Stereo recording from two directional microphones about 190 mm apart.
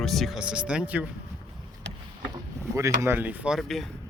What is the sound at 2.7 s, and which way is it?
Speech, 15° right (ahead or behind).